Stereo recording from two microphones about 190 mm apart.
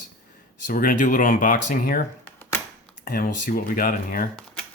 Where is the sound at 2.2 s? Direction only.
10° left (ahead or behind).